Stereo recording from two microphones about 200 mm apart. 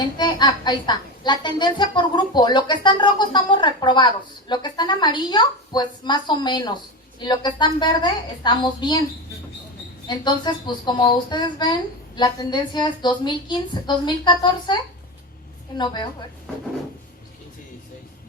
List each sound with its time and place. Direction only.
0.2 s a woman's voice: 20° left (ahead or behind)
10.1 s a woman's voice: 20° left (ahead or behind)
15.8 s a woman's voice: 20° left (ahead or behind)